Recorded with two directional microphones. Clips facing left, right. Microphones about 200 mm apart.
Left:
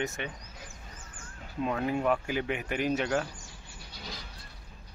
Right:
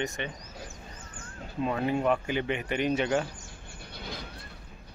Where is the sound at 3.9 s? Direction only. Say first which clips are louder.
Right 4 dB; 55° right (ahead or behind).